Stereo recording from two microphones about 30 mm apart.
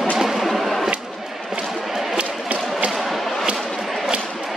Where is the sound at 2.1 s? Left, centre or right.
Right.